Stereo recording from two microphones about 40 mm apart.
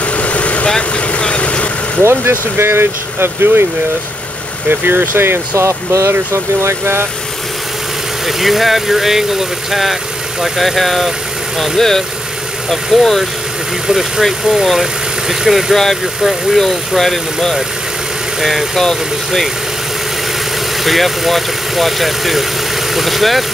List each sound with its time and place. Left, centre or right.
0.0 s vehicle: left
2.0 s speech: right
4.6 s speech: right
6.6 s speech: right
8.3 s speech: centre
13.8 s speech: centre
14.2 s speech: centre
15.7 s speech: centre
18.8 s speech: centre
20.8 s speech: centre